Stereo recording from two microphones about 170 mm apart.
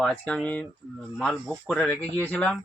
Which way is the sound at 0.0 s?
5° left (ahead or behind).